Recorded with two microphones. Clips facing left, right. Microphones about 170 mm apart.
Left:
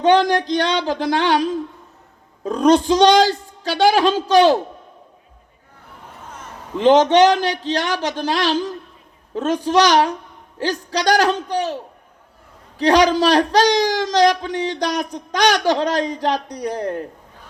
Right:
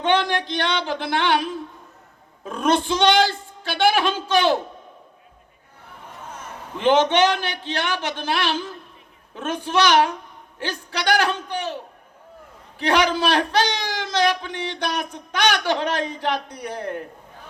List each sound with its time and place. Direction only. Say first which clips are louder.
0.0 s a man's voice: left 6 dB; 40° left (ahead or behind)
6.7 s a man's voice: left 5 dB; 40° left (ahead or behind)
12.8 s a man's voice: left 6 dB; 40° left (ahead or behind)